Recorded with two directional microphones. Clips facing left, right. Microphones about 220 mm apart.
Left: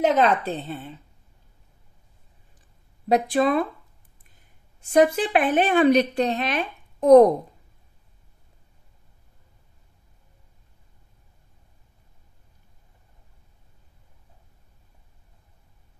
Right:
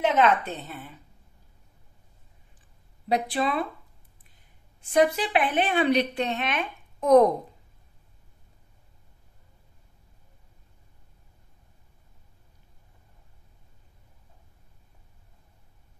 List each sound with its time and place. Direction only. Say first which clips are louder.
0.0 s a woman's voice: left 2 dB; 35° left (ahead or behind)
3.1 s a woman's voice: left 6 dB; 45° left (ahead or behind)
4.8 s a woman's voice: left 4 dB; 45° left (ahead or behind)